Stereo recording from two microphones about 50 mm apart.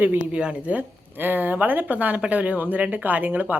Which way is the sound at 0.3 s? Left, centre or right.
Right.